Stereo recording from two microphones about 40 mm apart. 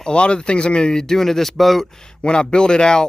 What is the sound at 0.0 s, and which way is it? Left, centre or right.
Speech, left.